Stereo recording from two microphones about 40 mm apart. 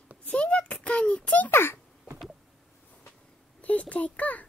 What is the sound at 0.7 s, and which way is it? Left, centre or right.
Child singing, left.